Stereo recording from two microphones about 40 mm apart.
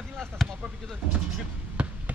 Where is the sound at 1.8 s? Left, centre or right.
Right.